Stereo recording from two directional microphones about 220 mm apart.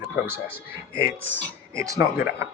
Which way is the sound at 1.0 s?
60° right (ahead or behind).